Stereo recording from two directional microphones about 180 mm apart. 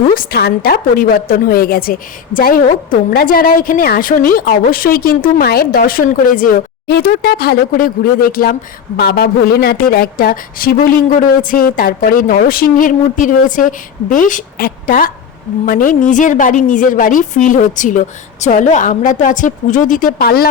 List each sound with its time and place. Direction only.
0.1 s a woman's voice: 55° left (ahead or behind)